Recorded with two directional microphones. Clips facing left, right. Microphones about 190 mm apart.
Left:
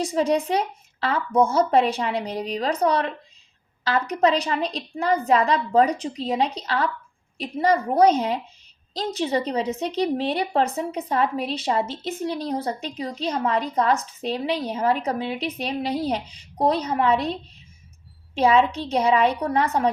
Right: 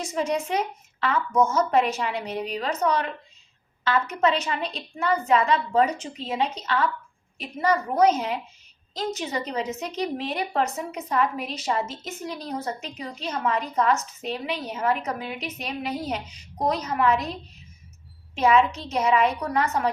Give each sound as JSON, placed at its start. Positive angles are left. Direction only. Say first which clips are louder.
{"t": 0.0, "sound": "a woman's voice", "louder": "left 5 dB", "side_deg": 35}
{"t": 18.3, "sound": "a woman's voice", "louder": "left 2 dB", "side_deg": 30}